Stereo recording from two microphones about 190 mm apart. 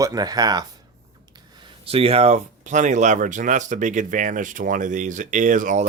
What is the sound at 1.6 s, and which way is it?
Speech, 30° right (ahead or behind).